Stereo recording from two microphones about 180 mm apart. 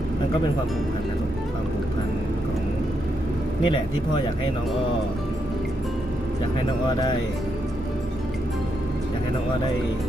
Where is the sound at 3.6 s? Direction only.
25° left (ahead or behind).